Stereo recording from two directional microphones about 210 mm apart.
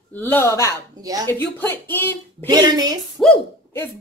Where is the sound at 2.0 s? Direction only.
20° right (ahead or behind).